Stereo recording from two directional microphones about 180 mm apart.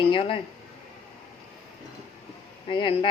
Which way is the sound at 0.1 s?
30° left (ahead or behind).